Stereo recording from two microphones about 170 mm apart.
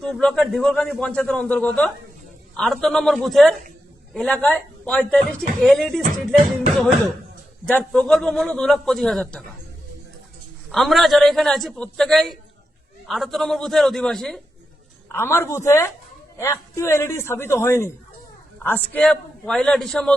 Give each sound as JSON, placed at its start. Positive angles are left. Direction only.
{"t": 0.0, "sound": "a man's voice", "side_deg": 5}
{"t": 10.7, "sound": "a man's voice", "side_deg": 0}
{"t": 15.1, "sound": "a man's voice", "side_deg": 15}